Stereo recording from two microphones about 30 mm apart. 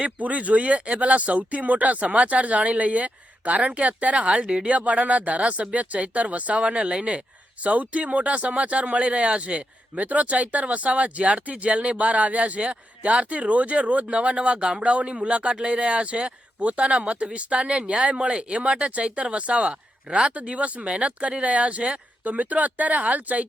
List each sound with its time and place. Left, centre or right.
0.2 s speech: right
6.6 s speech: right
7.6 s speech: right
10.0 s speech: right
20.3 s speech: right
22.2 s speech: right